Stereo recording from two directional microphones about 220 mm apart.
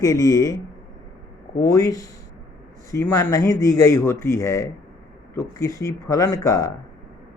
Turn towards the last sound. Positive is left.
turn(degrees=15)  # may be behind; listen again after turning